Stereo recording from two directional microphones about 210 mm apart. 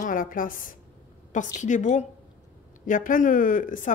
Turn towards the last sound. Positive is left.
turn(degrees=40)  # may be behind; listen again after turning